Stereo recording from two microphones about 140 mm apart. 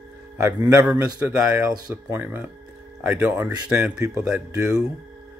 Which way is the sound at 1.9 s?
15° right (ahead or behind).